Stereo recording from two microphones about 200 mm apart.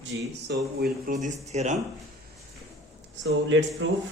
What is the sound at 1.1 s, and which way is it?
Speech, 35° right (ahead or behind).